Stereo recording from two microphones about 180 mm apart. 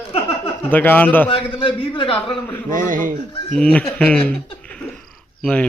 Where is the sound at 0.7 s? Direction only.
10° left (ahead or behind).